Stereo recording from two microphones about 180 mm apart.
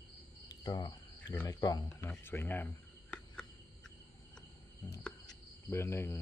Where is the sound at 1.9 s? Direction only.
15° left (ahead or behind).